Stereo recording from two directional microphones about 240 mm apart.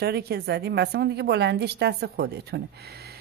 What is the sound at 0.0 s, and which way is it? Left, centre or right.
Speech, right.